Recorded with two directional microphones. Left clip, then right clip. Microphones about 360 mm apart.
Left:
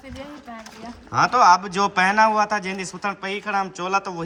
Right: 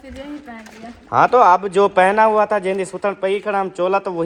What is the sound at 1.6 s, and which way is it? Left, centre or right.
A man's voice, centre.